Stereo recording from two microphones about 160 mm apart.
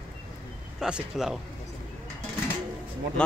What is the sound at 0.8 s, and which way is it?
Speech, 5° right (ahead or behind).